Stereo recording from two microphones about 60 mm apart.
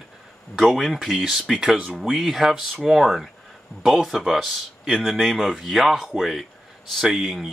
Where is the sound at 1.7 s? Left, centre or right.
Centre.